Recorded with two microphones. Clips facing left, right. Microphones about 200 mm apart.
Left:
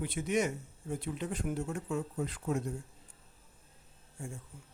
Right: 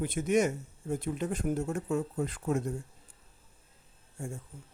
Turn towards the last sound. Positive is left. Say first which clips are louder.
# right 4 dB
turn(degrees=-45)  # may be behind; listen again after turning